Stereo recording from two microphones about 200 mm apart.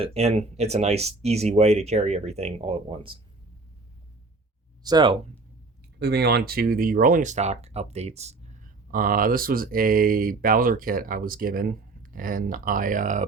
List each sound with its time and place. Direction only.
0.0 s speech: 30° right (ahead or behind)
4.8 s speech: 20° right (ahead or behind)
6.0 s speech: 55° right (ahead or behind); by 13.2 s 40° right (ahead or behind)